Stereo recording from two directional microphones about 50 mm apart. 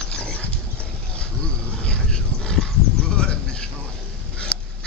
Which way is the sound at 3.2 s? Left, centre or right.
Centre.